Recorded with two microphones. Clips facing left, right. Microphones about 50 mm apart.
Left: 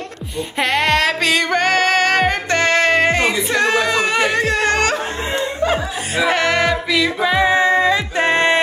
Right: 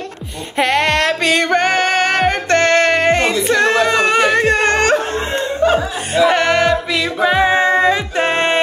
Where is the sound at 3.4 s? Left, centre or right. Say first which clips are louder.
Right 3 dB; right.